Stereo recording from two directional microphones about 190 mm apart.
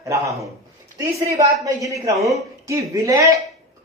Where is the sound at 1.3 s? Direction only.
15° right (ahead or behind).